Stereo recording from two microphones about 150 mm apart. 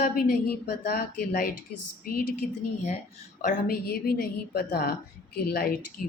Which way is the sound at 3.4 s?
75° left (ahead or behind).